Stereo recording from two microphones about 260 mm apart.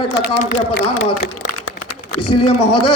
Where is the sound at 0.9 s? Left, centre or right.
Left.